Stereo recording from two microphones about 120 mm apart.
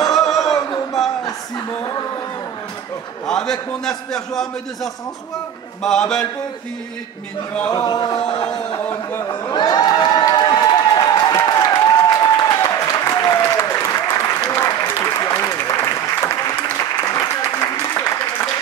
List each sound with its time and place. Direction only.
0.1 s a sound: centre (ahead or behind)
3.3 s a man's voice: 5° left (ahead or behind)
5.8 s a man's voice: 5° left (ahead or behind)
7.7 s a sound: 35° left (ahead or behind)
8.4 s speech: 10° left (ahead or behind)
9.3 s crowd: 35° left (ahead or behind)
12.4 s applause: 30° left (ahead or behind)